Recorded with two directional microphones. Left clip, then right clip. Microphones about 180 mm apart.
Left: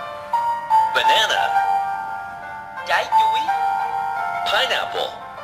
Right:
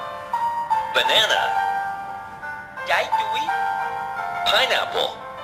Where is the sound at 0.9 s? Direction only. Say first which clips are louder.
Left 2 dB; 10° right (ahead or behind).